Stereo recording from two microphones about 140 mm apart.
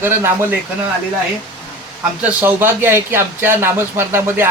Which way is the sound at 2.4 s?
15° right (ahead or behind).